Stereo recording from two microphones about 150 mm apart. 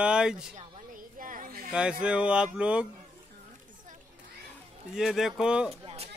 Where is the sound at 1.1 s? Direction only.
65° right (ahead or behind).